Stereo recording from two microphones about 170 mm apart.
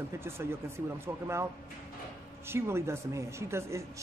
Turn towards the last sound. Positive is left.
turn(degrees=-15)  # may be behind; listen again after turning